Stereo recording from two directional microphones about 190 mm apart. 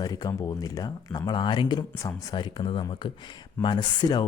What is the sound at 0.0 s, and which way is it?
Speech, 20° left (ahead or behind).